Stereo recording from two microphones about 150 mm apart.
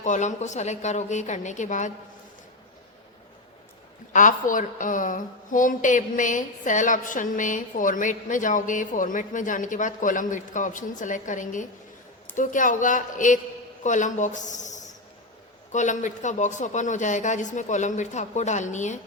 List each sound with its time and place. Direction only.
0.0 s speech: 55° left (ahead or behind)
4.1 s a woman's voice: 60° left (ahead or behind)